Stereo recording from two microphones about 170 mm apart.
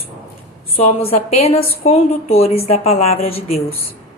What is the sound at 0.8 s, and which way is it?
A woman's voice, 40° left (ahead or behind).